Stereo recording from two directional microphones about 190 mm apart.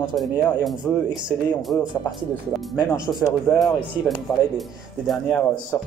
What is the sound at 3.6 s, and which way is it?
Speech, centre (ahead or behind).